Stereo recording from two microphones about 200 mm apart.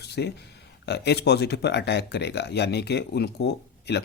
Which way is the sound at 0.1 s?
55° left (ahead or behind).